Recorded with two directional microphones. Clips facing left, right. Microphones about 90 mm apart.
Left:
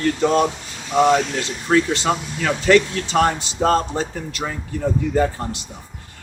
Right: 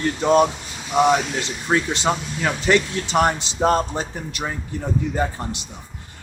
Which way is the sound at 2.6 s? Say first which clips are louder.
Left 5 dB; 20° right (ahead or behind).